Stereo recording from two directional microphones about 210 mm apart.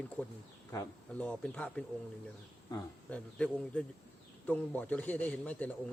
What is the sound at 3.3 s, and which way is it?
Speech, 5° left (ahead or behind).